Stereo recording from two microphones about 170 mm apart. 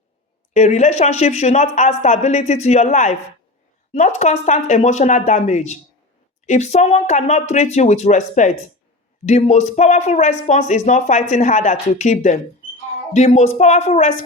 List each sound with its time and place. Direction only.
0.5 s speech: 45° left (ahead or behind)